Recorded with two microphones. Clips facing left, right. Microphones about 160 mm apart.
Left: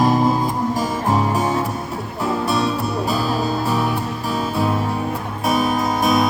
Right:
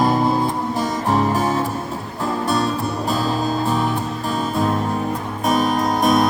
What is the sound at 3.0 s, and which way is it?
Music, 10° left (ahead or behind).